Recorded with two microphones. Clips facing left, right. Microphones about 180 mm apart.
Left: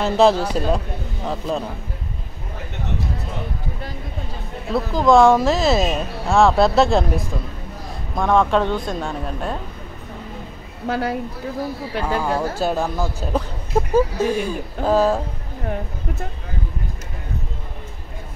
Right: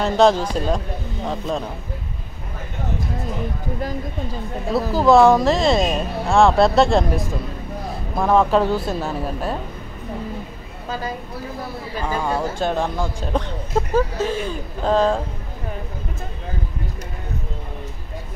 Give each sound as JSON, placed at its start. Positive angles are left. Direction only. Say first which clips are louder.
{"t": 0.0, "sound": "speech", "louder": "even", "side_deg": 5}
{"t": 4.7, "sound": "speech", "louder": "even", "side_deg": -5}
{"t": 10.9, "sound": "a woman's voice", "louder": "left 5 dB", "side_deg": 70}
{"t": 12.0, "sound": "speech", "louder": "left 1 dB", "side_deg": 5}